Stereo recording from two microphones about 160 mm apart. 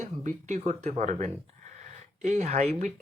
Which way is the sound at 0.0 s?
50° right (ahead or behind).